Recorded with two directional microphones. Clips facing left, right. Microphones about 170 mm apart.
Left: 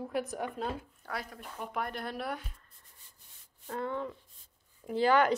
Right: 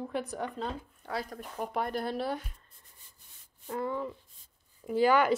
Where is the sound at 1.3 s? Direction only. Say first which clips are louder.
Right 5 dB; 40° right (ahead or behind).